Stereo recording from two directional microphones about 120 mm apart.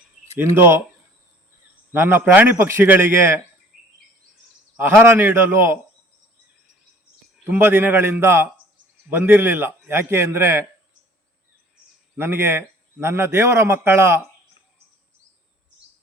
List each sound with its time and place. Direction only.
0.3 s a man's voice: 20° right (ahead or behind)
1.9 s a man's voice: 20° right (ahead or behind)
3.7 s a sound: 5° right (ahead or behind)
4.8 s a man's voice: 20° right (ahead or behind)
7.4 s a man's voice: 15° right (ahead or behind)
12.1 s a man's voice: 20° right (ahead or behind)